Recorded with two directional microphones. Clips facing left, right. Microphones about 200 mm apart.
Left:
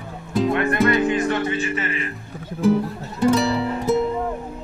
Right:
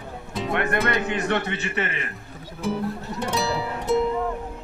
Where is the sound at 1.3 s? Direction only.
65° right (ahead or behind).